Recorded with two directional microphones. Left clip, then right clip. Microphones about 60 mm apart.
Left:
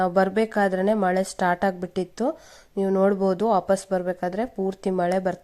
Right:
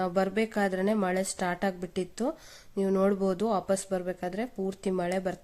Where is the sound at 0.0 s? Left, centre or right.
Left.